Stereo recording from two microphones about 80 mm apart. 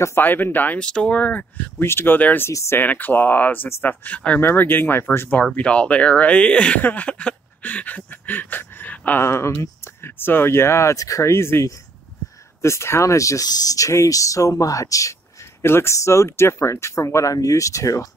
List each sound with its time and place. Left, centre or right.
0.0 s speech: left
2.5 s speech: left
2.8 s speech: left
5.4 s speech: centre
9.2 s speech: left
15.6 s speech: left